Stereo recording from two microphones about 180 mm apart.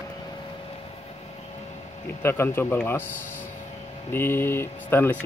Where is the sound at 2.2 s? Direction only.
15° left (ahead or behind).